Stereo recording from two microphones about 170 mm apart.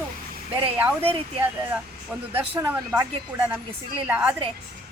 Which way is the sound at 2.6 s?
10° right (ahead or behind).